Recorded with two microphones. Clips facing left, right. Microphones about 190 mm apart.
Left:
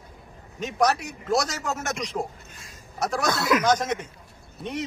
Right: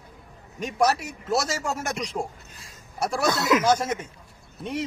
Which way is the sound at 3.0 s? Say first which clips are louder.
Right 1 dB; 10° right (ahead or behind).